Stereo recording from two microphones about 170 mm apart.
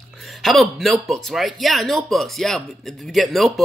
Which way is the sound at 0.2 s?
Centre (ahead or behind).